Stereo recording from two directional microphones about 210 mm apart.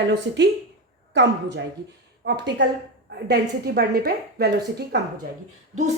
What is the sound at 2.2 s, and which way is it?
A woman's voice, 55° right (ahead or behind).